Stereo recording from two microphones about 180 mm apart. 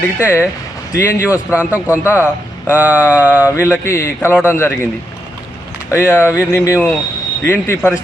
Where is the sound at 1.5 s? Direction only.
10° right (ahead or behind).